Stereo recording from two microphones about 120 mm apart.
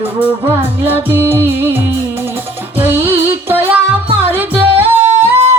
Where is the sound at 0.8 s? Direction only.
15° right (ahead or behind).